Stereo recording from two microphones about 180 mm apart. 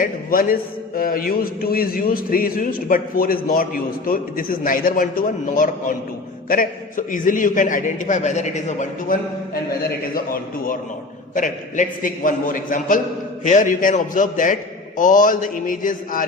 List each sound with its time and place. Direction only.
0.0 s a man's voice: 50° left (ahead or behind)
10.2 s a man's voice: 50° left (ahead or behind)